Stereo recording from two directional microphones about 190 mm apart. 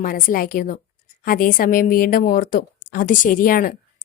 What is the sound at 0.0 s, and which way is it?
A woman's voice, 45° left (ahead or behind).